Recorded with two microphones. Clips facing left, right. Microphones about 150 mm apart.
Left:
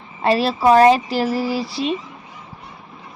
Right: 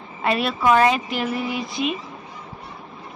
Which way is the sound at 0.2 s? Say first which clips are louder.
Left 5 dB; 30° left (ahead or behind).